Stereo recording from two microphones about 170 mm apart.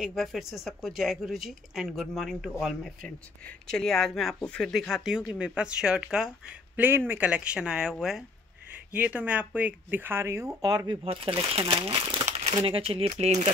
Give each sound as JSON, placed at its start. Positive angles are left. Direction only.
{"t": 0.0, "sound": "speech", "side_deg": 0}
{"t": 8.9, "sound": "speech", "side_deg": -10}
{"t": 11.1, "sound": "speech", "side_deg": -30}